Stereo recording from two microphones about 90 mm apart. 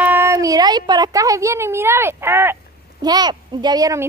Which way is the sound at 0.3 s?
40° right (ahead or behind).